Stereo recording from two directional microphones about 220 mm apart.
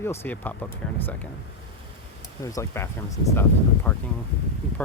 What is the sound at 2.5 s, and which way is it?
Speech, 15° left (ahead or behind).